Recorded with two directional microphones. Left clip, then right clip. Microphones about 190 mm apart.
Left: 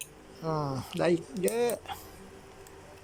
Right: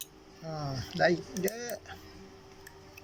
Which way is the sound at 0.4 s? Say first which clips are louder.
Left 6 dB; 20° left (ahead or behind).